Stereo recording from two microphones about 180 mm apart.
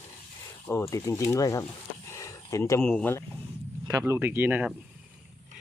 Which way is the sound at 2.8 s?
5° left (ahead or behind).